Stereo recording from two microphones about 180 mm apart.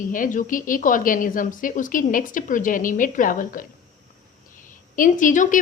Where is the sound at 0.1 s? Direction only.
45° left (ahead or behind).